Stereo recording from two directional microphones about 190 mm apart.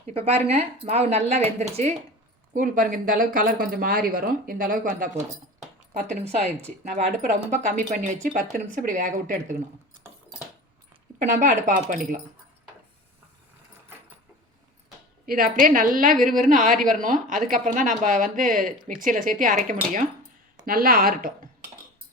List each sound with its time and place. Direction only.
0.1 s speech: 30° right (ahead or behind)
11.2 s speech: 40° right (ahead or behind)
15.3 s speech: 50° right (ahead or behind)